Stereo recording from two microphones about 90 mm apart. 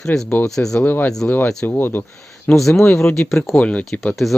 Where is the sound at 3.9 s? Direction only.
Centre (ahead or behind).